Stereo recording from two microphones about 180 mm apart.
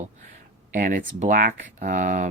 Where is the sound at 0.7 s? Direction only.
50° right (ahead or behind).